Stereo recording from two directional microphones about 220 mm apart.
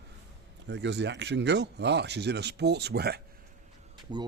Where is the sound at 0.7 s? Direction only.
50° right (ahead or behind).